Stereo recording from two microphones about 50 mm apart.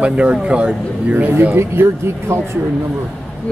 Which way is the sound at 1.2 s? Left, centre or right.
Right.